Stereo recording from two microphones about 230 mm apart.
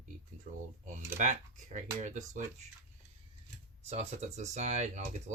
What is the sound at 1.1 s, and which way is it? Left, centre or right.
Speech, right.